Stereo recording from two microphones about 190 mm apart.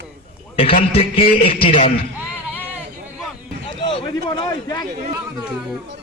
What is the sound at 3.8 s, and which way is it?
A man's voice, 25° left (ahead or behind).